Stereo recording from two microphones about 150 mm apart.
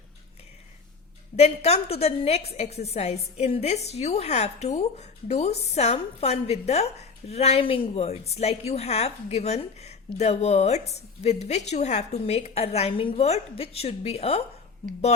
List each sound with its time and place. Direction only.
1.4 s a woman's voice: 45° left (ahead or behind)